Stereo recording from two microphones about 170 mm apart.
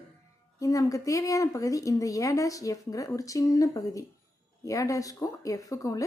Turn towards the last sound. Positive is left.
turn(degrees=20)  # may be behind; listen again after turning